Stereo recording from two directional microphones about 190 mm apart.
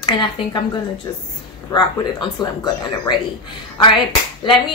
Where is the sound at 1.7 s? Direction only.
20° left (ahead or behind).